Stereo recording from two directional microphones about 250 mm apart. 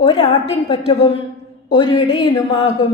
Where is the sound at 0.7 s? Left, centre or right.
Left.